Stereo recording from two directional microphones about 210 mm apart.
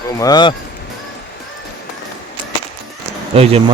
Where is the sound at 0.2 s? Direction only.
20° left (ahead or behind).